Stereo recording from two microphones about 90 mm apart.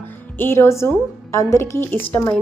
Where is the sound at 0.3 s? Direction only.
25° left (ahead or behind).